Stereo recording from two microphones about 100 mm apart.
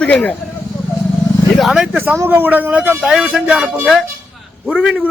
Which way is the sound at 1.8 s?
15° right (ahead or behind).